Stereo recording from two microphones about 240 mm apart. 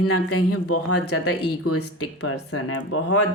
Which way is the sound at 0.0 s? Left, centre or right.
Left.